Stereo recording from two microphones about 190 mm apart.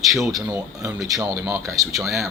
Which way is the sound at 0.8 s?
20° right (ahead or behind).